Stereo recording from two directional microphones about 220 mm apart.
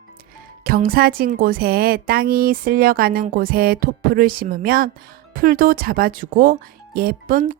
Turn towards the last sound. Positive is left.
turn(degrees=-40)  # may be behind; listen again after turning